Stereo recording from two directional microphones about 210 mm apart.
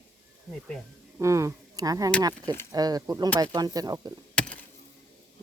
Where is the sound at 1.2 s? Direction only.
15° right (ahead or behind).